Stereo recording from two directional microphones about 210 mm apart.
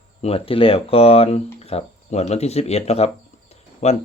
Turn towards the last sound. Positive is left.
turn(degrees=30)  # may be behind; listen again after turning